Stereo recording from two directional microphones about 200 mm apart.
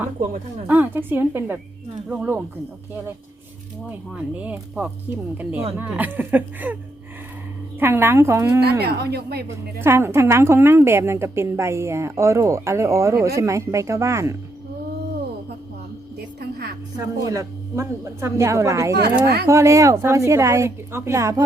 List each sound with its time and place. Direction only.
0.7 s a woman's voice: 10° right (ahead or behind)
3.8 s a woman's voice: 5° right (ahead or behind)
7.8 s a woman's voice: 10° right (ahead or behind)
8.8 s speech: 55° right (ahead or behind)
9.8 s a woman's voice: 10° right (ahead or behind)
17.0 s a woman's voice: 15° right (ahead or behind)